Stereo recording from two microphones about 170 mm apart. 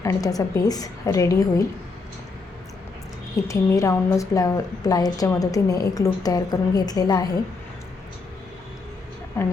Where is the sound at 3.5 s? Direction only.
20° left (ahead or behind).